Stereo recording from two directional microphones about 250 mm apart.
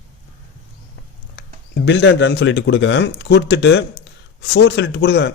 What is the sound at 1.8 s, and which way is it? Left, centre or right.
A man's voice, left.